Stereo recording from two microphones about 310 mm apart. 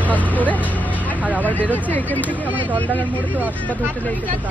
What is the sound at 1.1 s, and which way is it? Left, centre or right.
Vehicle, centre.